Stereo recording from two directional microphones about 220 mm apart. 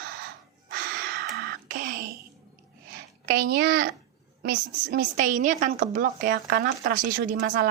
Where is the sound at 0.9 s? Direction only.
45° right (ahead or behind).